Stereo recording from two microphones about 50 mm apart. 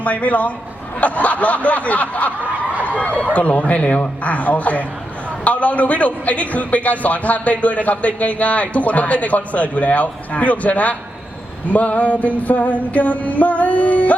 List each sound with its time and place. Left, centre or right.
0.0 s snicker: left
2.8 s a man's voice: left